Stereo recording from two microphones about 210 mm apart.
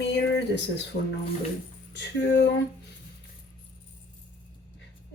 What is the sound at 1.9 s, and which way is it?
Speech, 55° left (ahead or behind).